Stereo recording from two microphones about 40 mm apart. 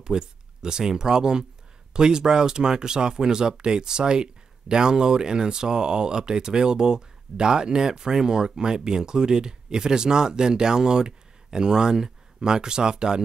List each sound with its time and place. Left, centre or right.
0.0 s speech: centre